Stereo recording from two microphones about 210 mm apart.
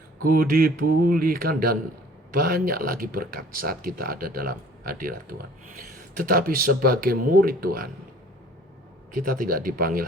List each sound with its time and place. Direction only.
0.2 s speech: 45° right (ahead or behind)
9.1 s speech: 40° right (ahead or behind)